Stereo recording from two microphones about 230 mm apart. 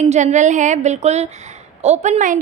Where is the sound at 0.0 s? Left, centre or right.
Right.